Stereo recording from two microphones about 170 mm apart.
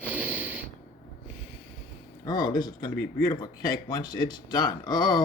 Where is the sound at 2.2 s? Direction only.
25° left (ahead or behind).